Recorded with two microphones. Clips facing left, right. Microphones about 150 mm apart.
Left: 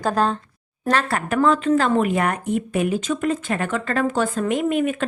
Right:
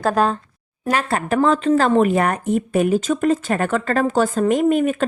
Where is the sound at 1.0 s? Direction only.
30° right (ahead or behind).